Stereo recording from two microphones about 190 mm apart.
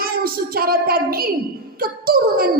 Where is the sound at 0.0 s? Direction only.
50° right (ahead or behind).